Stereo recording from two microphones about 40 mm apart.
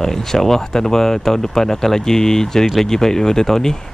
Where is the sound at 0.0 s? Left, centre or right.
Centre.